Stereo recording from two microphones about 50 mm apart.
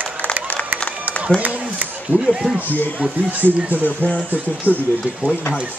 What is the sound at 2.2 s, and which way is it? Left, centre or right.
Speech, centre.